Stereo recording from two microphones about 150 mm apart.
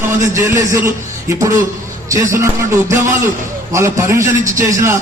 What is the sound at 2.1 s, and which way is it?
Speech, 20° right (ahead or behind).